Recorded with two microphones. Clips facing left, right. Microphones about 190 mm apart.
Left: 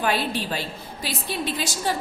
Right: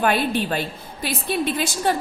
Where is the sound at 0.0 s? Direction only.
55° right (ahead or behind).